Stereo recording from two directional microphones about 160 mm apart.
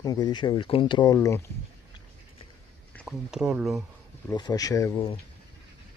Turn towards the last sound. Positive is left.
turn(degrees=25)  # may be behind; listen again after turning